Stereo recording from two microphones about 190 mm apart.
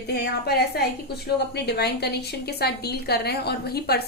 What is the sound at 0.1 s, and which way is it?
A woman's voice, 55° left (ahead or behind).